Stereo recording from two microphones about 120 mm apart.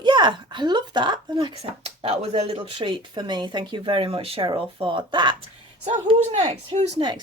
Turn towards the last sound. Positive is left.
turn(degrees=-40)  # may be behind; listen again after turning